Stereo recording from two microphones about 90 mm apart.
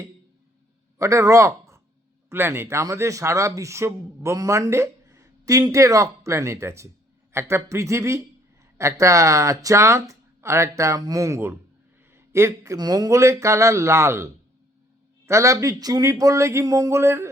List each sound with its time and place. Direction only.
0.9 s a man's voice: 35° right (ahead or behind)
15.3 s a man's voice: 35° right (ahead or behind)